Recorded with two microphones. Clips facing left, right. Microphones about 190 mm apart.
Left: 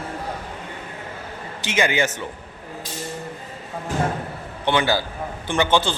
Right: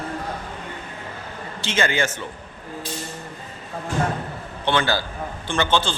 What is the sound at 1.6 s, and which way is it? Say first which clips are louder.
Speech: left 1 dB; 15° left (ahead or behind).